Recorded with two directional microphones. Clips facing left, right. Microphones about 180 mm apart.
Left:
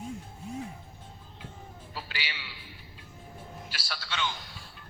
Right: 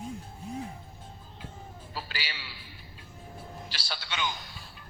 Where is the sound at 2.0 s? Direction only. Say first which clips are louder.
Right 1 dB; 40° right (ahead or behind).